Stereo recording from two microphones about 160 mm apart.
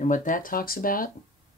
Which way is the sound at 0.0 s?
55° left (ahead or behind).